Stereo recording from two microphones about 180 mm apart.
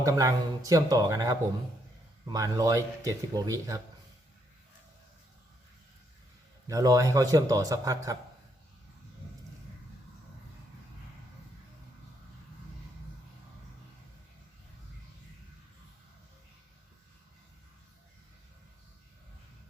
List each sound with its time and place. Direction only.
0.0 s speech: 20° right (ahead or behind)
6.7 s speech: 20° right (ahead or behind)